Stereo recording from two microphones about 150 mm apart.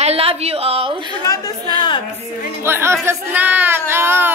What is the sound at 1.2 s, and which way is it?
Speech, 20° left (ahead or behind).